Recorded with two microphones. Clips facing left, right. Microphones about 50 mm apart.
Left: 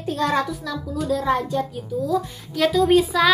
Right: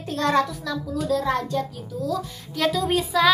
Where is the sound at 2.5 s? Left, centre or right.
Centre.